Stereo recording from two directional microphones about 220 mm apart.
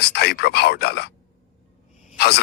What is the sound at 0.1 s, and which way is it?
Speech, 50° left (ahead or behind).